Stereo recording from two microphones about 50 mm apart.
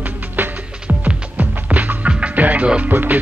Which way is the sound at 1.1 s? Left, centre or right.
Right.